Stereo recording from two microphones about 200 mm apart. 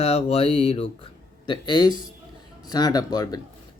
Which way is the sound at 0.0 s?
30° left (ahead or behind).